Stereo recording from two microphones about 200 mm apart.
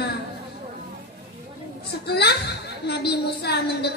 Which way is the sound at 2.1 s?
55° left (ahead or behind).